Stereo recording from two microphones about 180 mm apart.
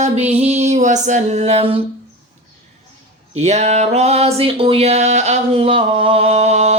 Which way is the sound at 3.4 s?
40° right (ahead or behind).